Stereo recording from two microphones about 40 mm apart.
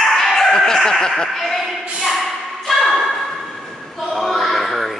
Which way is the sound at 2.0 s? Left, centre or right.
Centre.